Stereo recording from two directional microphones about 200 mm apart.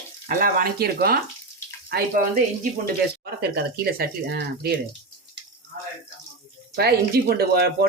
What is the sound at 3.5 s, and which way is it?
Speech, 50° right (ahead or behind).